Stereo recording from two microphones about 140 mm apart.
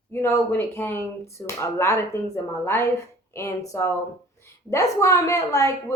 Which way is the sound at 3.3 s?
20° left (ahead or behind).